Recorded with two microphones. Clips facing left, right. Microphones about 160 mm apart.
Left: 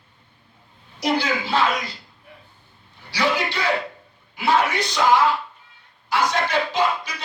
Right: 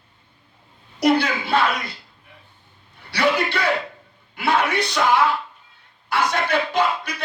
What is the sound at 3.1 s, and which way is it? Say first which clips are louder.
Speech: right 2 dB; 60° right (ahead or behind).